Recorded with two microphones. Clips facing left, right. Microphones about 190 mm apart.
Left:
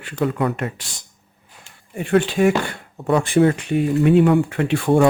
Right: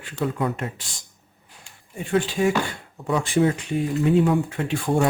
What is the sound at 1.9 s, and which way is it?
Speech, 65° left (ahead or behind).